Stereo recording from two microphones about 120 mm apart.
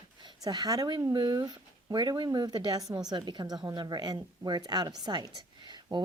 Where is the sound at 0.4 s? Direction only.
35° right (ahead or behind).